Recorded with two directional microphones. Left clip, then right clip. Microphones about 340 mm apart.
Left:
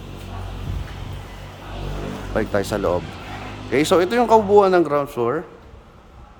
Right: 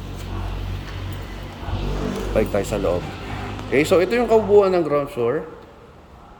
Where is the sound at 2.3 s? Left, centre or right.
Centre.